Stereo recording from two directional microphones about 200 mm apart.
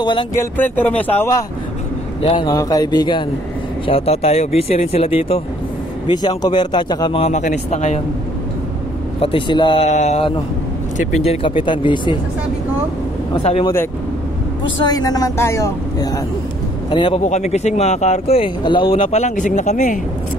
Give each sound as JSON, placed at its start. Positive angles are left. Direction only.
{"t": 0.0, "sound": "speech", "side_deg": 25}
{"t": 0.4, "sound": "a woman's voice", "side_deg": 10}
{"t": 2.2, "sound": "speech", "side_deg": 25}
{"t": 9.2, "sound": "speech", "side_deg": 25}
{"t": 13.4, "sound": "speech", "side_deg": 30}
{"t": 14.9, "sound": "a woman's voice", "side_deg": 20}
{"t": 17.2, "sound": "speech", "side_deg": 35}